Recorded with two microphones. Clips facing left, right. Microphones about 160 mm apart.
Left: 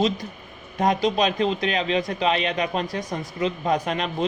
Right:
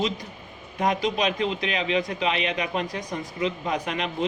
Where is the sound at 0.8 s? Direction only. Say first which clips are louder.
Left 3 dB; 40° left (ahead or behind).